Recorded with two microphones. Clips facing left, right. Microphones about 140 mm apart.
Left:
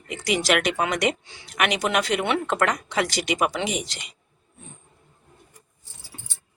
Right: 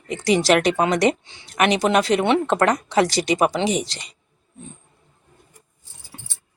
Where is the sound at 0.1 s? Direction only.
35° right (ahead or behind).